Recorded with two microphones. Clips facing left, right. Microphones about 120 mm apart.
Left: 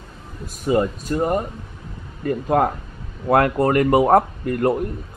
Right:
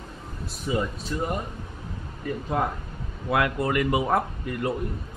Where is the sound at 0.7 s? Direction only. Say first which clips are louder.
Left 8 dB; 50° left (ahead or behind).